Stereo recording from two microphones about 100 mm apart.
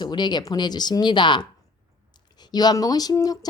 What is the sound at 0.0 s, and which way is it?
Speech, 50° left (ahead or behind).